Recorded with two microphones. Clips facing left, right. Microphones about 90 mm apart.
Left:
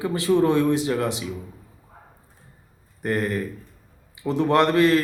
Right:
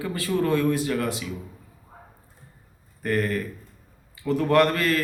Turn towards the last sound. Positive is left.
turn(degrees=20)  # may be behind; listen again after turning